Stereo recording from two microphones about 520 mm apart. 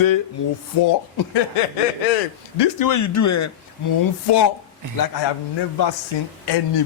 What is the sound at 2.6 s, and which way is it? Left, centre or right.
Speech, left.